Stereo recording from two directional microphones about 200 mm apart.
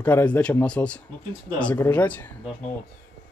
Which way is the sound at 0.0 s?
10° left (ahead or behind).